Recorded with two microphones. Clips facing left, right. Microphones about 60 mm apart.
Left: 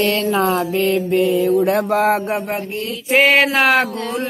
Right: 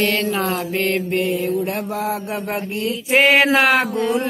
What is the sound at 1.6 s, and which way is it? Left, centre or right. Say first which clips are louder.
Mantra: left 8 dB; left.